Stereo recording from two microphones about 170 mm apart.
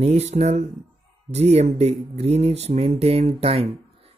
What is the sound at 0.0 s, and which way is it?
Speech, 40° right (ahead or behind).